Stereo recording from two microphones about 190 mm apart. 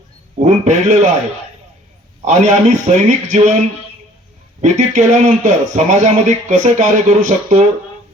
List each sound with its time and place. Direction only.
0.3 s a man's voice: 40° right (ahead or behind)
2.2 s a man's voice: 40° right (ahead or behind)
4.6 s a man's voice: 40° right (ahead or behind)